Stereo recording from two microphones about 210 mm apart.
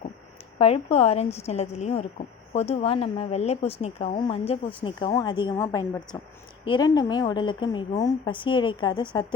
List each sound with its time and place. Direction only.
0.6 s a woman's voice: 30° left (ahead or behind)